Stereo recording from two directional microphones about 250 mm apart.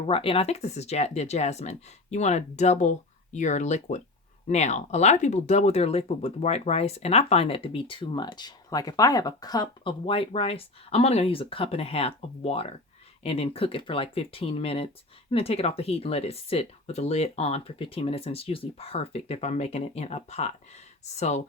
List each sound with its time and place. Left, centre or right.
0.1 s speech: left